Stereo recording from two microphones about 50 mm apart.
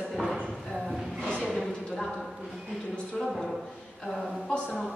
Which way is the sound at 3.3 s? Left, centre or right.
Centre.